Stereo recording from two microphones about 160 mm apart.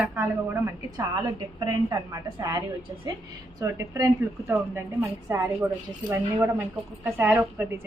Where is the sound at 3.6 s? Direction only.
20° right (ahead or behind).